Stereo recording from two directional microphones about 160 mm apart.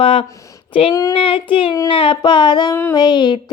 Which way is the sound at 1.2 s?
35° left (ahead or behind).